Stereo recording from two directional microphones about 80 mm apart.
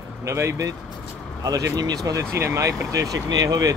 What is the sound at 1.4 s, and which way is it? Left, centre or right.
Speech, right.